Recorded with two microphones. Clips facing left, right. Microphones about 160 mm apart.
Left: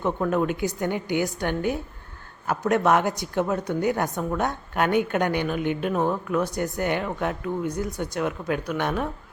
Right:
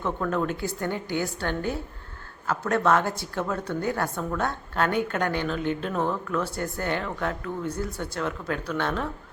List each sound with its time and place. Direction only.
0.0 s a woman's voice: 15° left (ahead or behind)